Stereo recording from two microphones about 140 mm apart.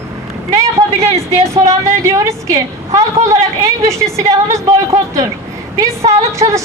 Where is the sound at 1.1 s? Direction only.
20° right (ahead or behind).